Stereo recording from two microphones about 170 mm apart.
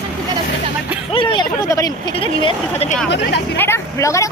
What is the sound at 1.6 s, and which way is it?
Speech, 20° left (ahead or behind).